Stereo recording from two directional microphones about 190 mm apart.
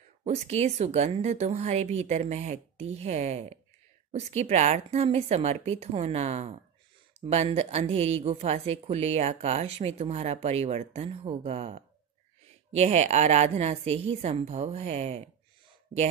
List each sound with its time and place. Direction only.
0.2 s speech: 35° right (ahead or behind)